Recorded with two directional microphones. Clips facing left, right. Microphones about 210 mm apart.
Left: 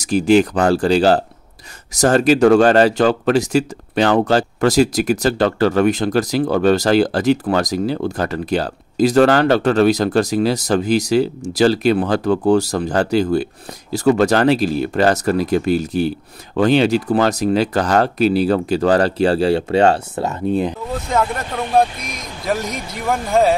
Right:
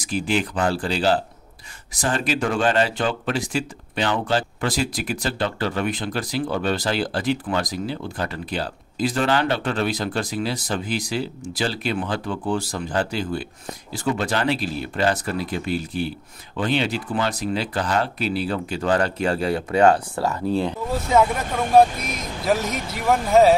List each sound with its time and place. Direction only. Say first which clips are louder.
0.0 s speech: left 10 dB; 40° left (ahead or behind); by 20.7 s 20° left (ahead or behind)
21.1 s speech: right 1 dB; 5° right (ahead or behind)